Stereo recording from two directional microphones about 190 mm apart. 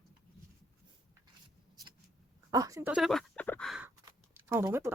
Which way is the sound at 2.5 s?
15° right (ahead or behind).